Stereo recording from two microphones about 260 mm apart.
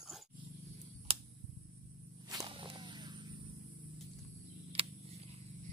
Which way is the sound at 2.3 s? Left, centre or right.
Centre.